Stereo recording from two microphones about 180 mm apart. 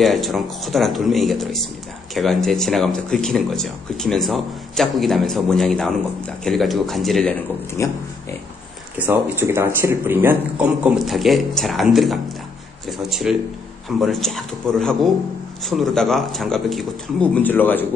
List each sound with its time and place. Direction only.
0.0 s speech: centre (ahead or behind)
7.8 s speech: 15° left (ahead or behind)
8.9 s speech: 10° right (ahead or behind); by 17.8 s 10° left (ahead or behind)